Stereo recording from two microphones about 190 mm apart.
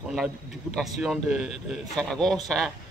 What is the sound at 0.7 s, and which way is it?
Speech, centre (ahead or behind).